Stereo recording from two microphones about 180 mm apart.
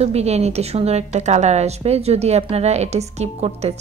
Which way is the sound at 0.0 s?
35° right (ahead or behind).